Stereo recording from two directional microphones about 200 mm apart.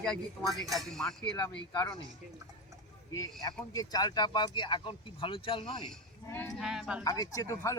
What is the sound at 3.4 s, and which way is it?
Speech, 20° left (ahead or behind).